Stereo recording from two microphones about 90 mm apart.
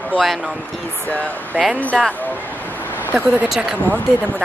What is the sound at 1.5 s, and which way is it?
Speech, 20° right (ahead or behind).